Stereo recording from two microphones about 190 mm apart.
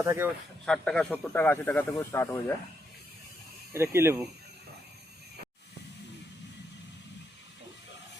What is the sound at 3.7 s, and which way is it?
Speech, 15° right (ahead or behind).